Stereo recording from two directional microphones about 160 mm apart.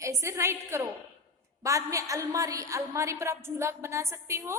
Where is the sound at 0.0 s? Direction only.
20° right (ahead or behind).